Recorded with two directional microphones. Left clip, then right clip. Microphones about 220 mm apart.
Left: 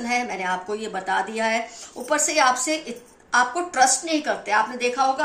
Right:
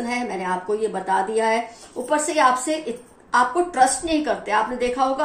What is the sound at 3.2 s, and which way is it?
A woman's voice, 40° left (ahead or behind).